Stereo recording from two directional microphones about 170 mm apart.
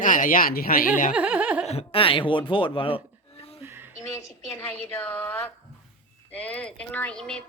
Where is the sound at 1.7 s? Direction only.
35° left (ahead or behind).